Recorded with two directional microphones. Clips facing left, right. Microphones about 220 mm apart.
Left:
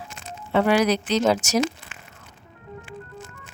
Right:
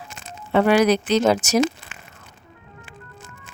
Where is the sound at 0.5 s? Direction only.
55° right (ahead or behind).